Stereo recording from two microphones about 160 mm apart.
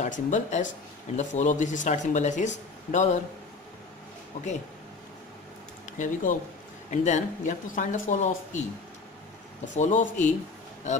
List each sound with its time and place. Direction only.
0.0 s speech: 50° left (ahead or behind)
5.9 s speech: 50° left (ahead or behind)
9.8 s speech: 50° left (ahead or behind)